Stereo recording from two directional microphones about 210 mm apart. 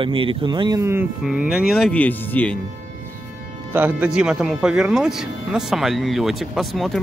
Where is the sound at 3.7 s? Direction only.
10° right (ahead or behind).